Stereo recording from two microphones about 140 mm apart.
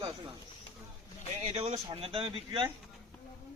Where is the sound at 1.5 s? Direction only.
50° right (ahead or behind).